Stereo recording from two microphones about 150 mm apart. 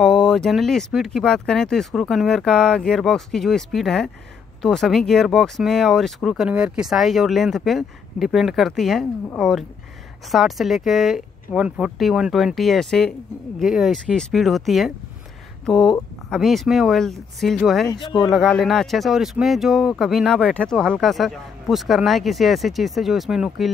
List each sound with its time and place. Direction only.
0.0 s speech: centre (ahead or behind)
17.9 s speech: 30° left (ahead or behind)
18.2 s speech: centre (ahead or behind)